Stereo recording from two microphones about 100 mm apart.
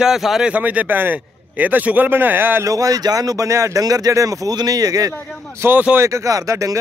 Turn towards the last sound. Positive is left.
turn(degrees=-35)  # may be behind; listen again after turning